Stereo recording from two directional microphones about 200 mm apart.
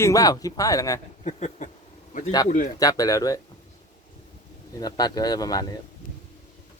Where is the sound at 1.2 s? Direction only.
35° left (ahead or behind).